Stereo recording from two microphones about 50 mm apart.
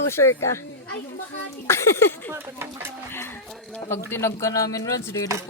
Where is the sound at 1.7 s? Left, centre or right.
Left.